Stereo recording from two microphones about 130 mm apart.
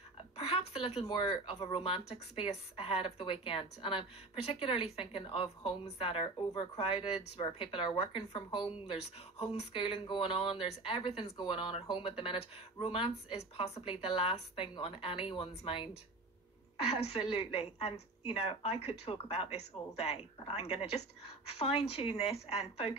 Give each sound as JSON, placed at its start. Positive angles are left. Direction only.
{"t": 0.4, "sound": "a sound", "side_deg": 50}
{"t": 1.1, "sound": "speech", "side_deg": 40}
{"t": 8.9, "sound": "speech", "side_deg": 50}